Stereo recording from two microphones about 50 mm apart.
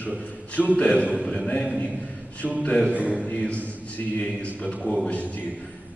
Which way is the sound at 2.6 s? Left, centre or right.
Centre.